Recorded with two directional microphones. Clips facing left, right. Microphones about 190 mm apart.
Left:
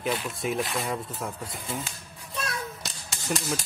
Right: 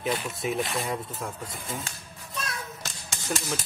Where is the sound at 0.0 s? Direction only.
Centre (ahead or behind).